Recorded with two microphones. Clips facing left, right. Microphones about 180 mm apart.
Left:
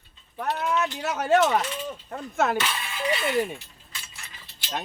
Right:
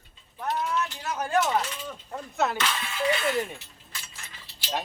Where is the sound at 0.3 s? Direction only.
70° left (ahead or behind).